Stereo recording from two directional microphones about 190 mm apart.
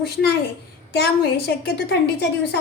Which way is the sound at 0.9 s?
55° left (ahead or behind).